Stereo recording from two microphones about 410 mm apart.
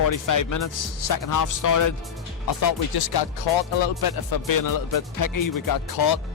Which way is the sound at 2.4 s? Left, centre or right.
Left.